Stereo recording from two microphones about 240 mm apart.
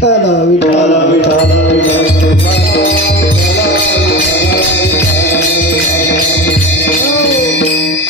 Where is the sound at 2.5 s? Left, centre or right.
Left.